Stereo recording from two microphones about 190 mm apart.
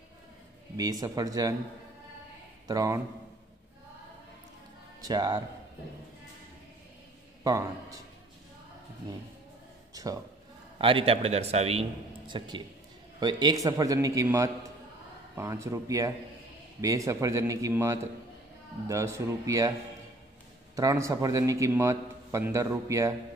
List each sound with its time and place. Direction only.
0.7 s a man's voice: 20° right (ahead or behind)
2.7 s a man's voice: 20° right (ahead or behind)
5.0 s a man's voice: 20° right (ahead or behind)
7.4 s a man's voice: 15° right (ahead or behind)
9.9 s a sound: 20° right (ahead or behind)
10.8 s a man's voice: 30° right (ahead or behind)
20.7 s a man's voice: 15° right (ahead or behind)